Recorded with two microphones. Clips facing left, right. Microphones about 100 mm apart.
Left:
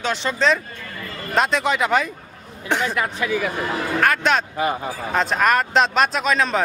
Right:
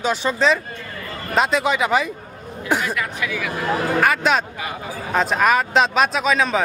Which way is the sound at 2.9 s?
35° left (ahead or behind).